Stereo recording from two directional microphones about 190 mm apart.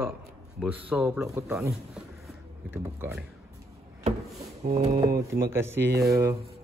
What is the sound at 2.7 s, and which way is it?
Speech, 10° right (ahead or behind).